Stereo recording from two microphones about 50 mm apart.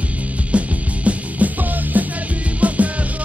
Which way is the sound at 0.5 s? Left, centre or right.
Right.